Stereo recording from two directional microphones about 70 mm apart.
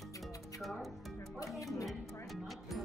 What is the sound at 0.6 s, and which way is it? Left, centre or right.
Speech, centre.